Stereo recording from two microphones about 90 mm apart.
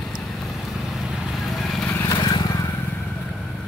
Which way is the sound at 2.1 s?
55° left (ahead or behind).